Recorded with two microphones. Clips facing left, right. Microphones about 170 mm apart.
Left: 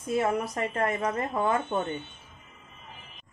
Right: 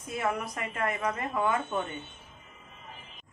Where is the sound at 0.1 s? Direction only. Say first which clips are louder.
Left 5 dB; 30° left (ahead or behind).